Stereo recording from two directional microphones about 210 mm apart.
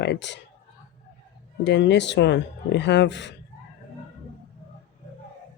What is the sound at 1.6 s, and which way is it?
Speech, 55° left (ahead or behind).